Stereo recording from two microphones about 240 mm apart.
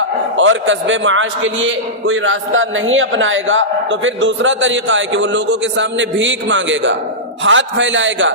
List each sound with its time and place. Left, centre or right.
0.3 s a man's voice: right